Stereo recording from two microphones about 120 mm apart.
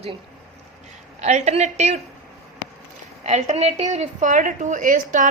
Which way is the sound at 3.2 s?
70° right (ahead or behind).